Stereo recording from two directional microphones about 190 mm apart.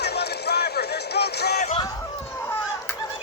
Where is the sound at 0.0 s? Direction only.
60° left (ahead or behind).